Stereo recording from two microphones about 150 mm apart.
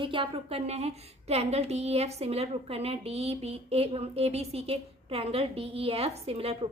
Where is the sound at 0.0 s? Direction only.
35° right (ahead or behind).